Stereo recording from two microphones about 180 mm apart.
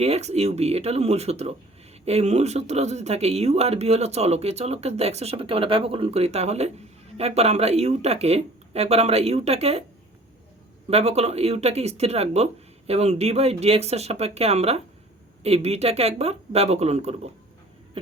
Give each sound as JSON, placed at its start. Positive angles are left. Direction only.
{"t": 0.0, "sound": "speech", "side_deg": -35}
{"t": 10.8, "sound": "speech", "side_deg": -35}